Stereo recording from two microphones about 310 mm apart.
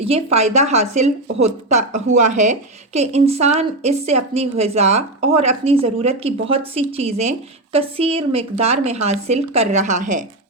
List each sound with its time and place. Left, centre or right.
0.0 s a woman's voice: centre